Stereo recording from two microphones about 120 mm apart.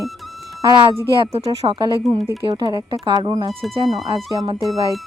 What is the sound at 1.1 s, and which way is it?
Speech, 50° right (ahead or behind).